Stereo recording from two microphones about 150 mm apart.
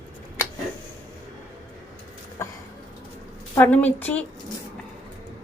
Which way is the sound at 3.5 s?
10° left (ahead or behind).